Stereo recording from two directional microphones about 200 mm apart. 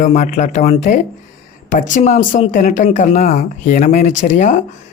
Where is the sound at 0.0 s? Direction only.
35° left (ahead or behind).